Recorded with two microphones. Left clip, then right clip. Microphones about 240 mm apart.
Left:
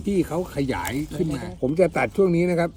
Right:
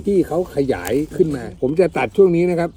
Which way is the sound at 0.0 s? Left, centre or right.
Centre.